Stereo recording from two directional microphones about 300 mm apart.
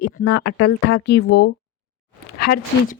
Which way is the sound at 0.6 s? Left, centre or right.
Left.